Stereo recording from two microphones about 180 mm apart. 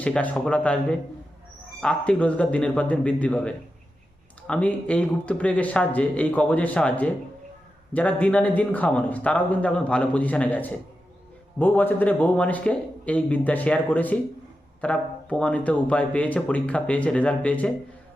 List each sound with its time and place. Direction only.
0.0 s speech: 5° left (ahead or behind)